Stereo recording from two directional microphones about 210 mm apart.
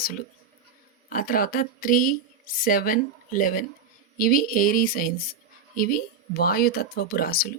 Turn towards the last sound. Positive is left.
turn(degrees=45)  # may be behind; listen again after turning